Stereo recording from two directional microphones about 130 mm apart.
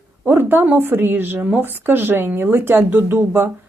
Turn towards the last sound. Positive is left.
turn(degrees=-15)  # may be behind; listen again after turning